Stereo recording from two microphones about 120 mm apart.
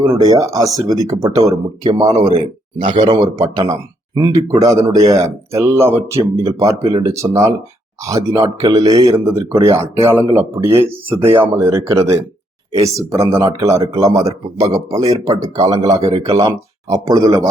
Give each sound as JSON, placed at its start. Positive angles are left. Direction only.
{"t": 0.0, "sound": "speech", "side_deg": -30}
{"t": 3.3, "sound": "speech", "side_deg": -30}